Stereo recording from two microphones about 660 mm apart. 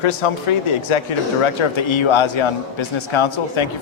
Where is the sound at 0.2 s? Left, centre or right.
Left.